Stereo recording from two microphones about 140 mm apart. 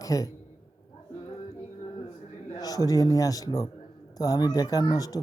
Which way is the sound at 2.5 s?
25° left (ahead or behind).